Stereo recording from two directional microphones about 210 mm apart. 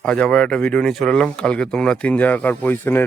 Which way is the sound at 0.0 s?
5° left (ahead or behind).